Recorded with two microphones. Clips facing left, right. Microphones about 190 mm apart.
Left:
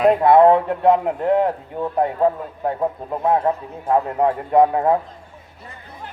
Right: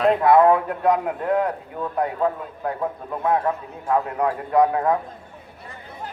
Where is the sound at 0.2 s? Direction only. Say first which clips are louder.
Left 3 dB; 25° left (ahead or behind).